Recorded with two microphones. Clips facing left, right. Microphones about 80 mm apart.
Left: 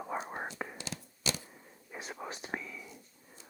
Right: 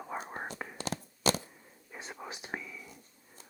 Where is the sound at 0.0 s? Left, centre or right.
Centre.